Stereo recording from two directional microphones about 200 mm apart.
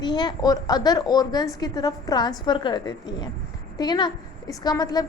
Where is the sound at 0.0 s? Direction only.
20° left (ahead or behind).